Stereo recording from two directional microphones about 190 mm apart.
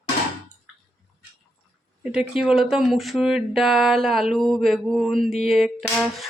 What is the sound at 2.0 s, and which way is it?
Speech, 5° right (ahead or behind).